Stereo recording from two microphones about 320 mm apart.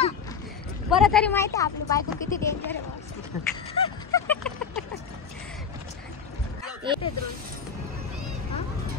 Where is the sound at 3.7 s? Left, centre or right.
Centre.